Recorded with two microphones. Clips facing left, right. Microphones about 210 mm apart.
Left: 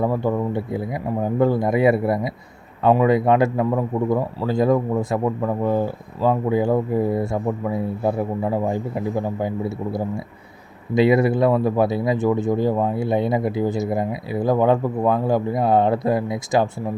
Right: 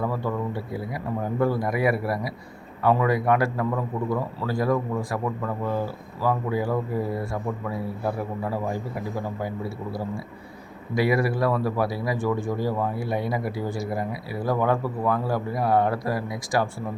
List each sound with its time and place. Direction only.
0.0 s a man's voice: 20° left (ahead or behind)